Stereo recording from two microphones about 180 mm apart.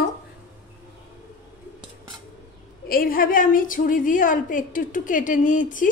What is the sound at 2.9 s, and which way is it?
A woman's voice, 55° left (ahead or behind).